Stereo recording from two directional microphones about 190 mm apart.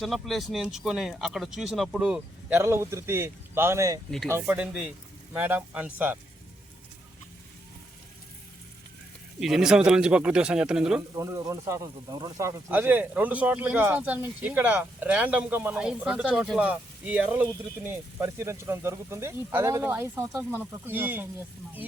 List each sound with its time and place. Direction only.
0.0 s speech: centre (ahead or behind)
9.4 s speech: centre (ahead or behind)
11.1 s speech: 15° right (ahead or behind)